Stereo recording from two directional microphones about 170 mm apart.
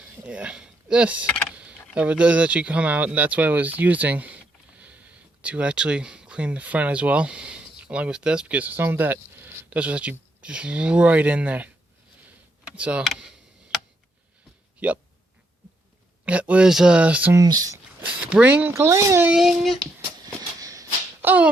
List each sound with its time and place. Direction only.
0.3 s speech: 5° right (ahead or behind)
12.6 s a sound: 5° right (ahead or behind)
14.8 s speech: 10° right (ahead or behind)
16.2 s speech: 10° right (ahead or behind)
17.3 s speech: 20° right (ahead or behind)
18.0 s speech: 10° right (ahead or behind)
20.2 s a sound: 20° right (ahead or behind)